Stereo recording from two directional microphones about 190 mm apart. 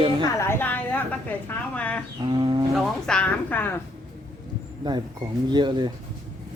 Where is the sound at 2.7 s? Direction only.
Centre (ahead or behind).